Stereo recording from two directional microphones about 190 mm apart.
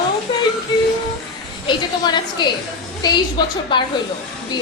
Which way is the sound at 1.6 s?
25° left (ahead or behind).